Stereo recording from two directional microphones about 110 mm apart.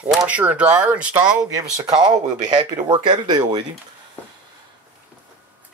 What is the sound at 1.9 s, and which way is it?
Speech, 40° right (ahead or behind).